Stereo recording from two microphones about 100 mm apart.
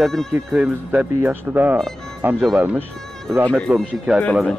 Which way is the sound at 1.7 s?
5° left (ahead or behind).